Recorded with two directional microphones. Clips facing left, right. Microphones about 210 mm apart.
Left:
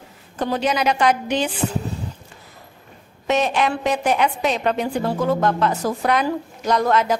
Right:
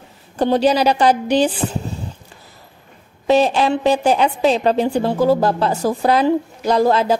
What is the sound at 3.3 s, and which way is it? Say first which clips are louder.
A woman's voice: right 5 dB; 30° right (ahead or behind).